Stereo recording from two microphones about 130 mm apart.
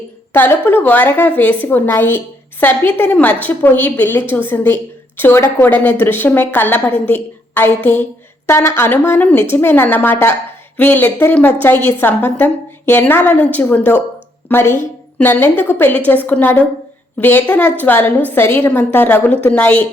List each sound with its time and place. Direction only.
0.3 s a woman's voice: 15° left (ahead or behind)